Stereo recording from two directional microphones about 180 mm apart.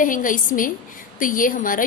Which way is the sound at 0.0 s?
50° left (ahead or behind).